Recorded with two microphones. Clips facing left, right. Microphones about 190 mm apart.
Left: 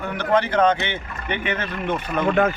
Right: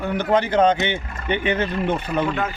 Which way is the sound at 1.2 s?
30° right (ahead or behind).